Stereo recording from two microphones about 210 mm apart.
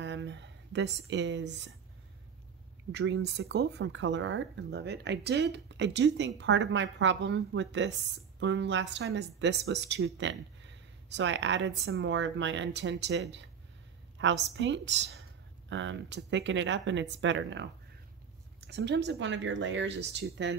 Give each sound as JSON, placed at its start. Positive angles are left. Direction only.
{"t": 0.0, "sound": "speech", "side_deg": -55}
{"t": 2.9, "sound": "speech", "side_deg": -55}